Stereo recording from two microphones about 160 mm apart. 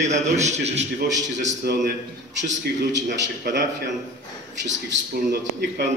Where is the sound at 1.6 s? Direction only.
85° right.